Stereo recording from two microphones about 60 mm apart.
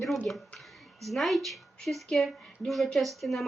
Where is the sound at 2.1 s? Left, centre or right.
Centre.